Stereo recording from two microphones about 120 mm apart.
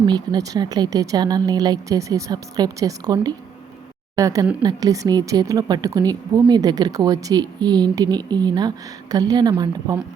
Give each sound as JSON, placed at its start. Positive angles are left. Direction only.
{"t": 0.0, "sound": "speech", "side_deg": -35}